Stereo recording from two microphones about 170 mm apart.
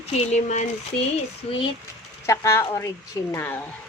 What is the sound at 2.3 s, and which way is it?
Speech, 15° left (ahead or behind).